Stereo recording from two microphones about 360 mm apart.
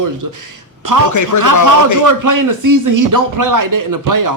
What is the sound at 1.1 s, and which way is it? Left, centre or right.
Speech, left.